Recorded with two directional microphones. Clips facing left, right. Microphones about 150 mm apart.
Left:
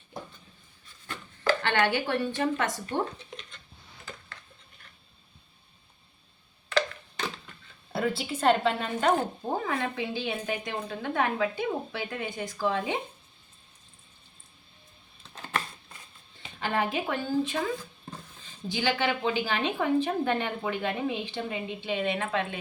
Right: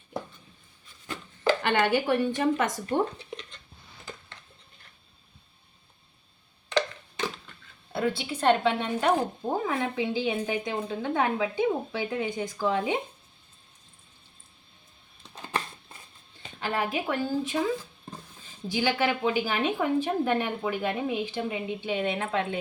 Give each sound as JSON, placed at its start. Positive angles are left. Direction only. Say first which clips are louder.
{"t": 1.0, "sound": "speech", "louder": "right 2 dB", "side_deg": -20}
{"t": 7.9, "sound": "speech", "louder": "right 1 dB", "side_deg": 5}
{"t": 16.6, "sound": "speech", "louder": "even", "side_deg": -5}